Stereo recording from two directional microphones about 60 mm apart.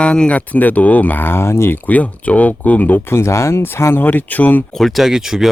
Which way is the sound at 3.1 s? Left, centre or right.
Left.